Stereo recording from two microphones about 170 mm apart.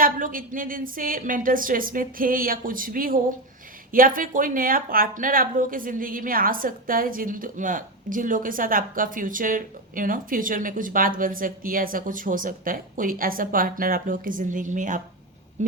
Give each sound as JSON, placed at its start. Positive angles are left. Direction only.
{"t": 0.0, "sound": "a woman's voice", "side_deg": -55}